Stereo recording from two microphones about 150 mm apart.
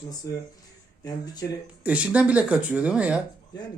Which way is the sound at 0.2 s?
20° left (ahead or behind).